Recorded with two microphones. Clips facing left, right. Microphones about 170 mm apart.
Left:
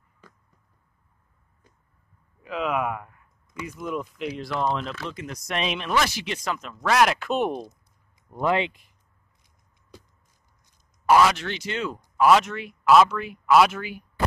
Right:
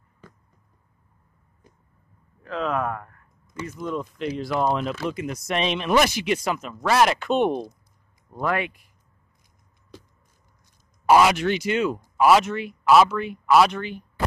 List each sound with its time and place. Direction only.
2.4 s speech: 10° left (ahead or behind)
5.9 s speech: 15° right (ahead or behind); by 7.7 s centre (ahead or behind)
8.3 s speech: 20° left (ahead or behind)
11.1 s speech: 15° right (ahead or behind); by 14.0 s 5° left (ahead or behind)